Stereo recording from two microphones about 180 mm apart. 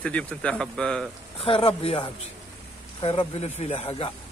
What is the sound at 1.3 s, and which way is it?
Speech, 30° left (ahead or behind).